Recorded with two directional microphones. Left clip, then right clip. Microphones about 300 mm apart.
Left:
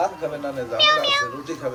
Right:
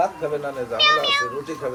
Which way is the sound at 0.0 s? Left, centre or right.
Right.